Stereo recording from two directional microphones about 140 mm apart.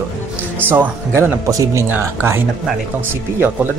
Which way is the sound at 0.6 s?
15° right (ahead or behind).